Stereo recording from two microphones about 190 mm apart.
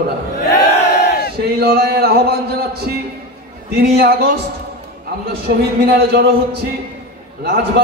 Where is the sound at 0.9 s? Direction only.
60° left (ahead or behind).